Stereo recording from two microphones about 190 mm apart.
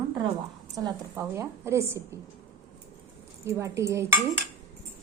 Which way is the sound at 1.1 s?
15° right (ahead or behind).